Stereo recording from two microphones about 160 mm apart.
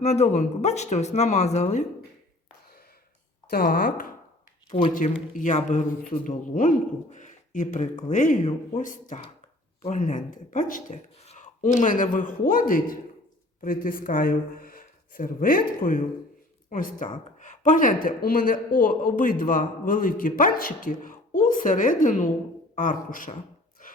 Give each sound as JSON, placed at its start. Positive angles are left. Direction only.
{"t": 0.0, "sound": "speech", "side_deg": 45}
{"t": 3.5, "sound": "a man's voice", "side_deg": 70}
{"t": 5.3, "sound": "a man's voice", "side_deg": 50}
{"t": 23.8, "sound": "a sound", "side_deg": 55}